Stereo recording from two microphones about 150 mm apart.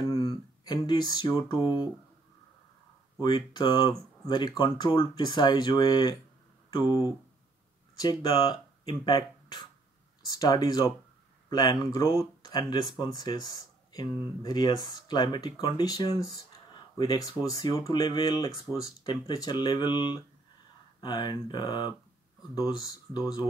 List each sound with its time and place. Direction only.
0.0 s music: 25° left (ahead or behind)
3.2 s speech: 30° left (ahead or behind)